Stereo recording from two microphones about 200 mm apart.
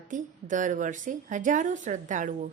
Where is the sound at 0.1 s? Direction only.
40° right (ahead or behind).